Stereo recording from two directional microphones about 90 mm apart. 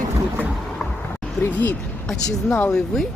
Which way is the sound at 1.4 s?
20° left (ahead or behind).